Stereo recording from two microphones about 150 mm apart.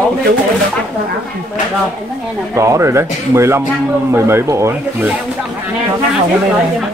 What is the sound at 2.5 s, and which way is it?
A man's voice, 20° right (ahead or behind).